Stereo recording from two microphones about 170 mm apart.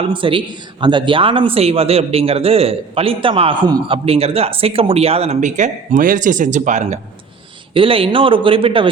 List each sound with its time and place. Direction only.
0.0 s a man's voice: 30° right (ahead or behind)
7.7 s a man's voice: 30° right (ahead or behind)